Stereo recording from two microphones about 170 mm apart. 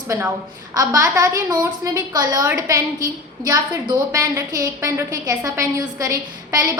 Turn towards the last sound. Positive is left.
turn(degrees=-20)  # may be behind; listen again after turning